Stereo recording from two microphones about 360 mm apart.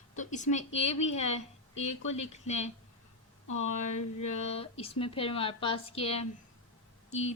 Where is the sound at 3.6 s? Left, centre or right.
Centre.